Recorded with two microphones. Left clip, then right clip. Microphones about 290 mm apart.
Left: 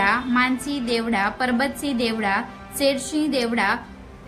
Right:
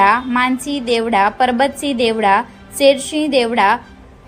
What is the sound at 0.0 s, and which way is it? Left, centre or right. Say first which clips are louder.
A woman's voice: right 7 dB; centre.